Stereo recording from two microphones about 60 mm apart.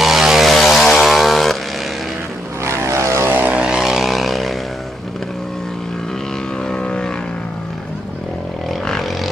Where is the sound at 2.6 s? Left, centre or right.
Right.